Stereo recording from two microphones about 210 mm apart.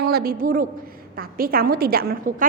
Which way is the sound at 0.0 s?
50° right (ahead or behind).